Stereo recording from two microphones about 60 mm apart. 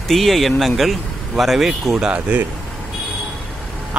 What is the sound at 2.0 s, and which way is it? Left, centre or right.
Speech, right.